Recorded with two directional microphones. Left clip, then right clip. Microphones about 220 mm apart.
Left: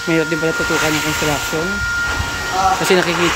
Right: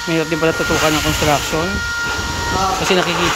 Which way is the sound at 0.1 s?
5° left (ahead or behind).